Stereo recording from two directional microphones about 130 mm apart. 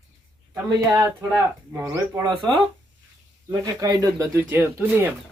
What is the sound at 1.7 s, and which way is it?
Speech, 20° right (ahead or behind).